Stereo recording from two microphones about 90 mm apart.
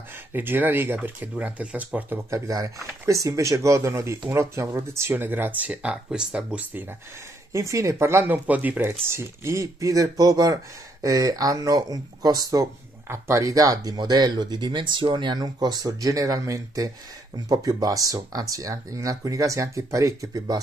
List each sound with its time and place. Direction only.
0.3 s speech: 25° right (ahead or behind)
2.3 s speech: 40° right (ahead or behind); by 6.9 s 20° right (ahead or behind)
7.5 s speech: 35° right (ahead or behind)